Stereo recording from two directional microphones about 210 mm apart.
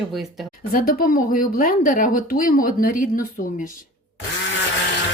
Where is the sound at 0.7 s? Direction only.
45° left (ahead or behind).